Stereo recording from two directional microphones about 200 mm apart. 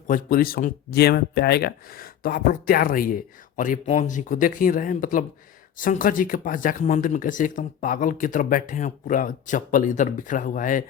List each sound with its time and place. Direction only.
0.1 s speech: 45° left (ahead or behind)